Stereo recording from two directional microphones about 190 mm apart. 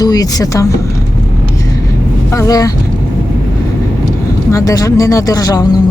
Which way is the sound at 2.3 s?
20° left (ahead or behind).